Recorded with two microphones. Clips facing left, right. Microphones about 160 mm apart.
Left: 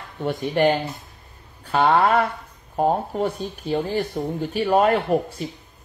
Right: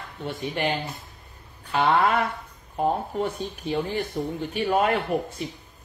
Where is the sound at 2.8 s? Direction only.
50° left (ahead or behind).